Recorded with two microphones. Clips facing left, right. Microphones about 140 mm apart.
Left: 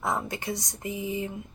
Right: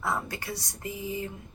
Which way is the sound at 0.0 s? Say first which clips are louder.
Left 2 dB; 20° left (ahead or behind).